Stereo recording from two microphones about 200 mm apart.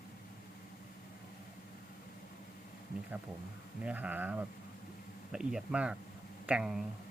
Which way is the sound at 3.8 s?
10° right (ahead or behind).